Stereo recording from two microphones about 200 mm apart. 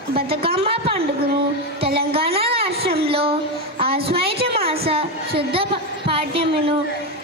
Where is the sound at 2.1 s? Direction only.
30° right (ahead or behind).